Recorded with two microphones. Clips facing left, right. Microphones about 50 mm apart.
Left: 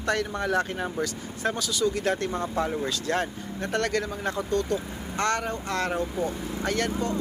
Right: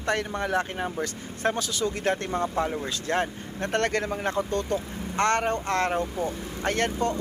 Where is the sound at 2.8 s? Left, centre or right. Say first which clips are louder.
Even; right.